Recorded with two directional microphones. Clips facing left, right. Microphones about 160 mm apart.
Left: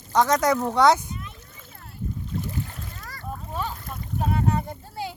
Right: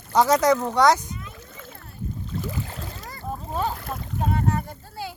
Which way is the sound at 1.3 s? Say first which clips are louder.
Right 6 dB; 90° right.